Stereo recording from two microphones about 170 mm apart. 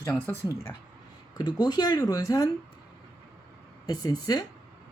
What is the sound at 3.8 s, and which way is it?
Speech, 20° left (ahead or behind).